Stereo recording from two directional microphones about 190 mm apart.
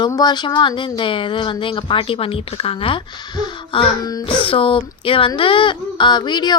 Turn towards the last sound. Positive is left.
turn(degrees=20)  # may be behind; listen again after turning